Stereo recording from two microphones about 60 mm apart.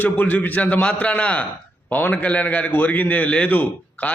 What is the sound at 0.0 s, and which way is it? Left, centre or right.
Speech, left.